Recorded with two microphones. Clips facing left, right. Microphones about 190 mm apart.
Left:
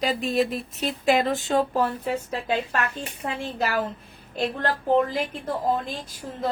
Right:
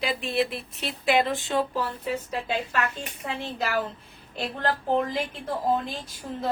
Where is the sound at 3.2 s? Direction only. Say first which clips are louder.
Left 3 dB; 45° left (ahead or behind).